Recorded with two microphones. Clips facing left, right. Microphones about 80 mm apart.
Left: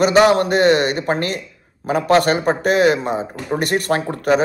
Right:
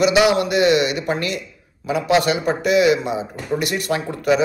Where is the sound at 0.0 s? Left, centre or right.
Left.